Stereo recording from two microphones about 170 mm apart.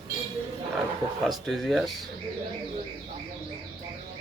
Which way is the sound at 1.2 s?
Centre (ahead or behind).